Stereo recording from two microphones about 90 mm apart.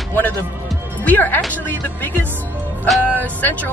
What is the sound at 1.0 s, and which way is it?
A woman's voice, 20° left (ahead or behind).